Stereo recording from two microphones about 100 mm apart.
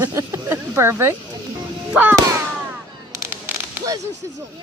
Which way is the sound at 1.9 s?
15° right (ahead or behind).